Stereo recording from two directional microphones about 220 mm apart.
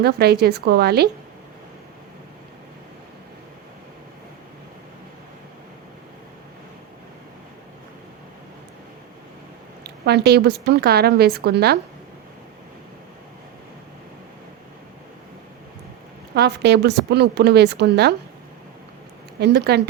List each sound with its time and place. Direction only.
0.0 s a woman's voice: 45° right (ahead or behind)
9.8 s a woman's voice: 50° right (ahead or behind)
16.3 s a woman's voice: 50° right (ahead or behind)
19.4 s a woman's voice: 50° right (ahead or behind)